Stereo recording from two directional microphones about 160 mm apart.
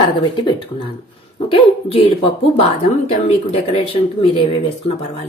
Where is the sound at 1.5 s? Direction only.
35° left (ahead or behind).